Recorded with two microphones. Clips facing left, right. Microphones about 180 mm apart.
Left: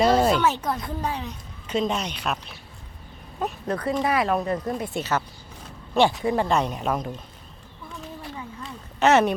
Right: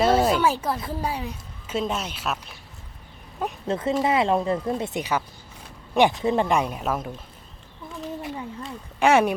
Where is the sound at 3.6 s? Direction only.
25° right (ahead or behind).